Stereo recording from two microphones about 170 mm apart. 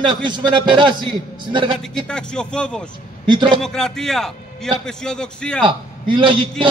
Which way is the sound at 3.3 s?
30° right (ahead or behind).